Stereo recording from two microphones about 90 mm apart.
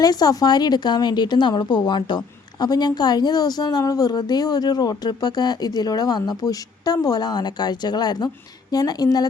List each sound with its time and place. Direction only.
0.0 s a woman's voice: 45° left (ahead or behind)